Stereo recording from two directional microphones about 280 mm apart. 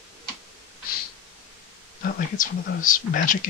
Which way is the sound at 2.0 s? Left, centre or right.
Left.